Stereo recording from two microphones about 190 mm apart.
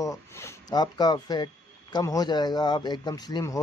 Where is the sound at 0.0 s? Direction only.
15° left (ahead or behind).